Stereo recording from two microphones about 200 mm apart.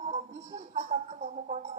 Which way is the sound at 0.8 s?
35° right (ahead or behind).